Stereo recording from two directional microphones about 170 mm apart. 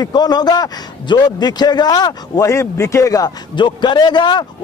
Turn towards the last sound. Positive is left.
turn(degrees=25)  # may be behind; listen again after turning